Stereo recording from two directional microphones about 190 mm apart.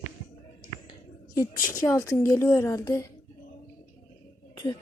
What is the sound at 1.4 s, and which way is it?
Speech, 15° left (ahead or behind).